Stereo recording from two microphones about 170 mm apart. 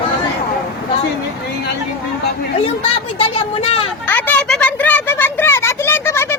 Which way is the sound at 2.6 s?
35° left (ahead or behind).